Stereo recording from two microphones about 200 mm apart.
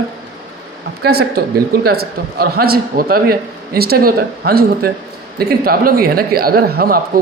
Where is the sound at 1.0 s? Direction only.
50° right (ahead or behind).